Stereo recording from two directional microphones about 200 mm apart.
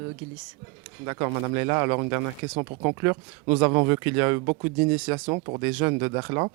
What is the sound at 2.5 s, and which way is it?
Speech, 25° right (ahead or behind).